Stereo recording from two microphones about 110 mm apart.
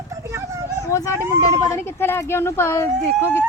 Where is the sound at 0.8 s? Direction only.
30° left (ahead or behind).